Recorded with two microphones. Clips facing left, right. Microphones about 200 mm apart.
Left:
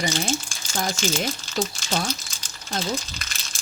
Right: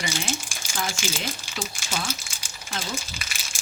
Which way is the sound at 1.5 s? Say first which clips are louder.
Left 6 dB; 10° right (ahead or behind).